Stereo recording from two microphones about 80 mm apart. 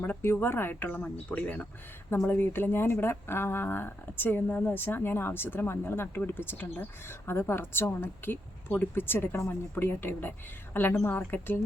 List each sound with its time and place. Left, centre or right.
0.0 s speech: left